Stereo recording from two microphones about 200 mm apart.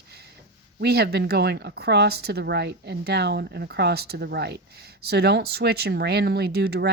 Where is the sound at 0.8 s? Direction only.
55° right (ahead or behind).